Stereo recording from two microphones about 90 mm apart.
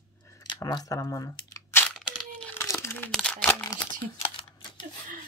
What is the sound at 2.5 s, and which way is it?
Crumpling, 30° left (ahead or behind).